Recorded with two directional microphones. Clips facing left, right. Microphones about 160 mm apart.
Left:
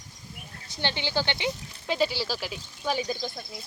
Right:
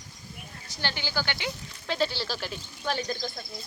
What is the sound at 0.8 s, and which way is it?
Speech, 20° left (ahead or behind).